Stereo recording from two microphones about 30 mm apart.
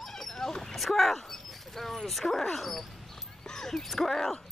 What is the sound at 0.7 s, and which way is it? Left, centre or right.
Speech, centre.